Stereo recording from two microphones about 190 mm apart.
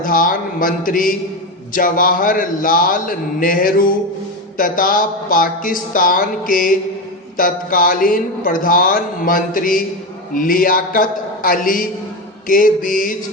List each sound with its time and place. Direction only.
0.0 s a man's voice: 45° left (ahead or behind)